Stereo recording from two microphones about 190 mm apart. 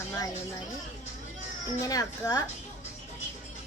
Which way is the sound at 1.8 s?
20° left (ahead or behind).